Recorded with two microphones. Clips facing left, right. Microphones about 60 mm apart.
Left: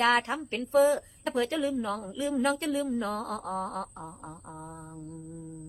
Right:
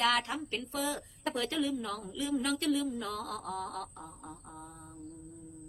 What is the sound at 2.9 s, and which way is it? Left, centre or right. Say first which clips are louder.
Mantra: left 6 dB; left.